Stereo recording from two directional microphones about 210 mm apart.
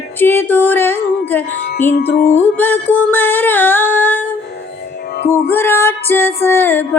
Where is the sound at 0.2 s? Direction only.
10° left (ahead or behind).